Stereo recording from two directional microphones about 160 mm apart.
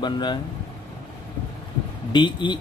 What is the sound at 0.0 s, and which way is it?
Speech, 30° left (ahead or behind).